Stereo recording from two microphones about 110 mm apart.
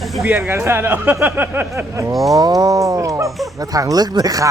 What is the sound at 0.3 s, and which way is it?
Speech, 25° right (ahead or behind).